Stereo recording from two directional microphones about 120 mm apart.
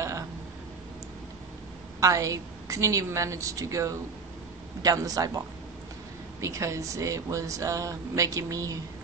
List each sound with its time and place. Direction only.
2.0 s speech: 25° right (ahead or behind)
6.4 s speech: 25° right (ahead or behind)